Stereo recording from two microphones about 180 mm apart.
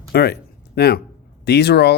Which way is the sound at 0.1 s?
65° left (ahead or behind).